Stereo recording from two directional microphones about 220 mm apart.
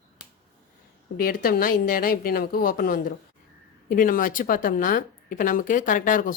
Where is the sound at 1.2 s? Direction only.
40° left (ahead or behind).